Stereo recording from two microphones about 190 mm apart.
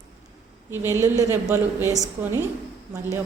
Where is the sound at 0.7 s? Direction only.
15° right (ahead or behind).